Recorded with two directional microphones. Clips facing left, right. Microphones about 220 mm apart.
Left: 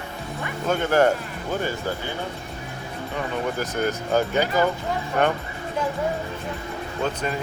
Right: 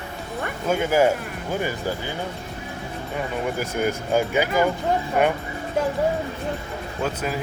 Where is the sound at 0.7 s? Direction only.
10° right (ahead or behind).